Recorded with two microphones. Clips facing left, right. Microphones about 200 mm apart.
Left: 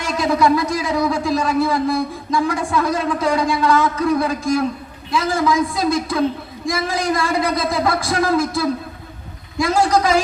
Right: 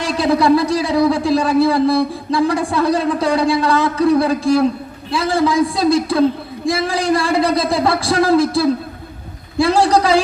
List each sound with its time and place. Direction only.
0.0 s speech: 30° right (ahead or behind)